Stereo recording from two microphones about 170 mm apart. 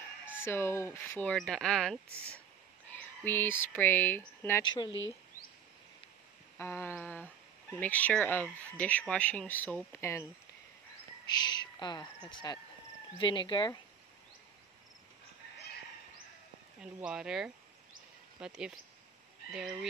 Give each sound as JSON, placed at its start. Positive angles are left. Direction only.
{"t": 0.4, "sound": "speech", "side_deg": 15}
{"t": 1.3, "sound": "speech", "side_deg": 5}
{"t": 4.6, "sound": "speech", "side_deg": 25}
{"t": 6.6, "sound": "speech", "side_deg": 15}
{"t": 11.4, "sound": "a woman's voice", "side_deg": 25}
{"t": 16.8, "sound": "speech", "side_deg": -5}